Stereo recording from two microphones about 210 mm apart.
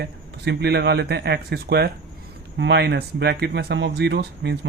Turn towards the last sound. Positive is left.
turn(degrees=-55)  # may be behind; listen again after turning